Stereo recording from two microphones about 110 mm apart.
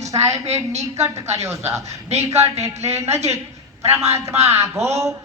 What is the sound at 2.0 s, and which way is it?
Speech, 80° right.